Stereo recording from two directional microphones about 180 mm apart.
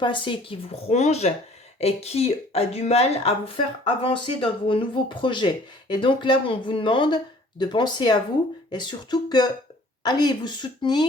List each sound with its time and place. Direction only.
0.0 s speech: 25° left (ahead or behind)